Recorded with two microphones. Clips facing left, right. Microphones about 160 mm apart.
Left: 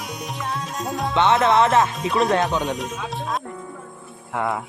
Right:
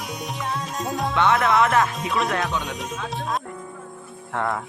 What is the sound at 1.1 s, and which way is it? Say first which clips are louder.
Music: left 3 dB; 25° left (ahead or behind).